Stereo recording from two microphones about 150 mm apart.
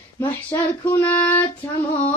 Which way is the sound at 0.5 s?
15° left (ahead or behind).